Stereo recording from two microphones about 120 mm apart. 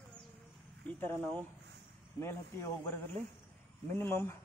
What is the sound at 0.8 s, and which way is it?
A man's voice, 15° left (ahead or behind).